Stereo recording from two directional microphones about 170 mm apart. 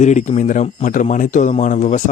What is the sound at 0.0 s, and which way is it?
Speech, 45° left (ahead or behind).